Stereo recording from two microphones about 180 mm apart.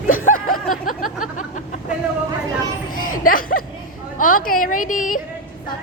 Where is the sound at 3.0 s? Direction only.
50° left (ahead or behind).